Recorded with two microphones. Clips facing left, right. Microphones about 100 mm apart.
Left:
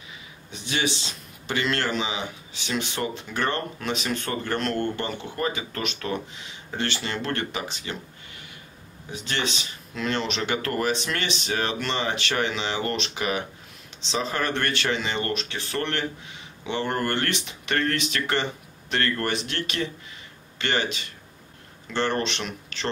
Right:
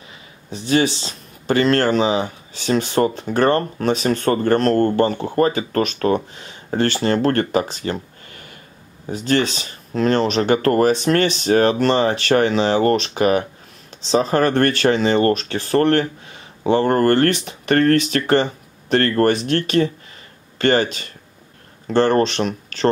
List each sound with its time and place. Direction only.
0.5 s speech: 40° right (ahead or behind)